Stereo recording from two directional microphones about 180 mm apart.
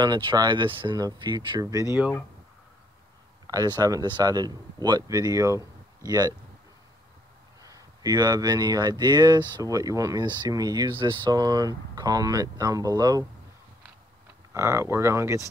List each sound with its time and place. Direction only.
0.0 s speech: 25° right (ahead or behind)
3.7 s speech: 20° right (ahead or behind)
7.6 s speech: 20° right (ahead or behind)
14.5 s speech: 15° right (ahead or behind)